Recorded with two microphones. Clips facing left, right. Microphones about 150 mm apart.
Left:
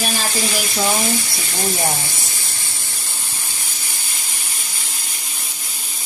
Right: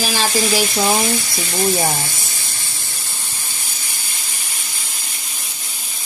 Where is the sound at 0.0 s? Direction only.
90° right.